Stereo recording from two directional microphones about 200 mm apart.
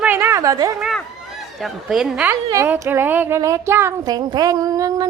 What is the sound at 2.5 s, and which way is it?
A woman's voice, 15° right (ahead or behind).